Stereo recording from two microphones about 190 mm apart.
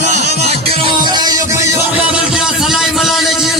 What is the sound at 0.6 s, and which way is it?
Music, 30° right (ahead or behind).